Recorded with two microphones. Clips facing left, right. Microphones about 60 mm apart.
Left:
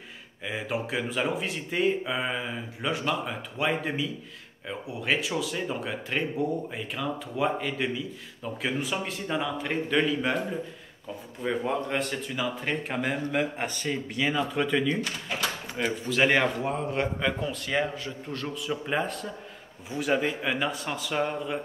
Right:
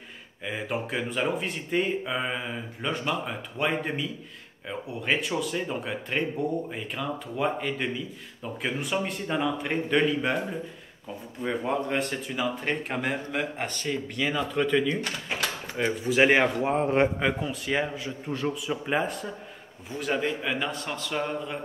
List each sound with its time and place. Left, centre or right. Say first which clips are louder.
0.5 s speech: even; centre
15.8 s a man's voice: right 3 dB; centre
16.6 s a man's voice: right 5 dB; right
17.2 s a man's voice: right 1 dB; centre